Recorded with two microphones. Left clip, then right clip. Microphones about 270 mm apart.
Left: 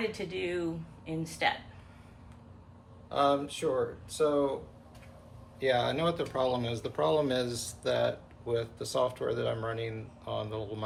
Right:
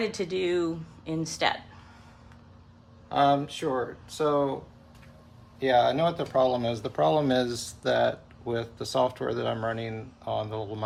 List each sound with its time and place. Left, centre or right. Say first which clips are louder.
0.2 s speech: right 7 dB; centre
3.1 s speech: right 4 dB; right
5.5 s speech: right 6 dB; right